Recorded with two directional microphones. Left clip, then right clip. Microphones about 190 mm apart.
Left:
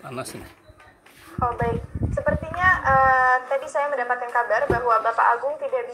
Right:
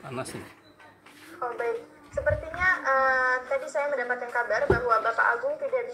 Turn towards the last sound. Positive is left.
turn(degrees=0)  # may be behind; listen again after turning